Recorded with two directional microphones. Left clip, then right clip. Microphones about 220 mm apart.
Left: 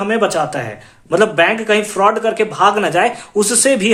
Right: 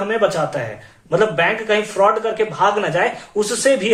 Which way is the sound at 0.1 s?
45° left (ahead or behind).